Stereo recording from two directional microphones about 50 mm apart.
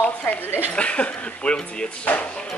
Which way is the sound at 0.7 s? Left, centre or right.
Left.